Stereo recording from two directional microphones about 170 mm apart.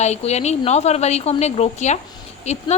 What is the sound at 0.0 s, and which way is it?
A woman's voice, 40° left (ahead or behind).